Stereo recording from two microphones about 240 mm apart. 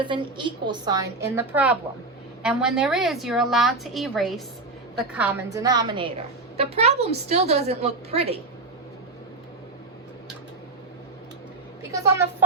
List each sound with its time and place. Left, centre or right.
0.0 s a woman's voice: centre
11.8 s a woman's voice: centre